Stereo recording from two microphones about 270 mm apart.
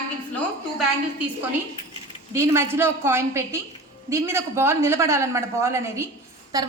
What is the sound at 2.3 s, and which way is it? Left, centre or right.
A woman's voice, centre.